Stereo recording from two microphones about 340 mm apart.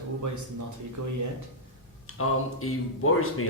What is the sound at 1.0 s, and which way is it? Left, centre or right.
Speech, right.